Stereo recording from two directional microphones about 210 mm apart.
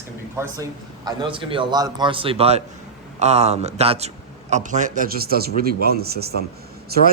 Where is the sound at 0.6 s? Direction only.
20° right (ahead or behind).